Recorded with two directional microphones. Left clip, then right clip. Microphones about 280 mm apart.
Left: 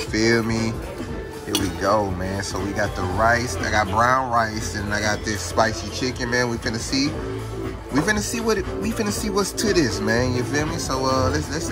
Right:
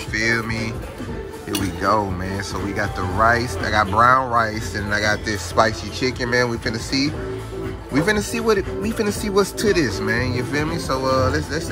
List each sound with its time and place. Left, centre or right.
0.1 s speech: centre
1.5 s speech: centre